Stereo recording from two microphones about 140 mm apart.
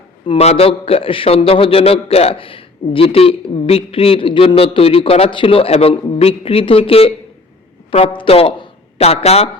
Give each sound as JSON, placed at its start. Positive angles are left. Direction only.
{"t": 0.3, "sound": "a man's voice", "side_deg": 45}